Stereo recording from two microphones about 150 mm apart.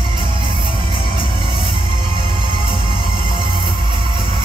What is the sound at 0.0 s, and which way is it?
Music, 30° right (ahead or behind).